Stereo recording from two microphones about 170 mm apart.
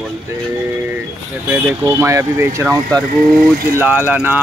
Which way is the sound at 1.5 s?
15° right (ahead or behind).